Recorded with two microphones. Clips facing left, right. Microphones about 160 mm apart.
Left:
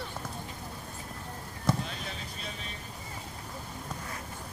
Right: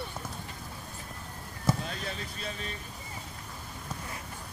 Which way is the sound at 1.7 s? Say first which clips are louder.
Even; 5° right (ahead or behind).